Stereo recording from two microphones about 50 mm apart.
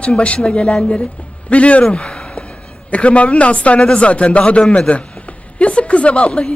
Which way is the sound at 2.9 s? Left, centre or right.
Left.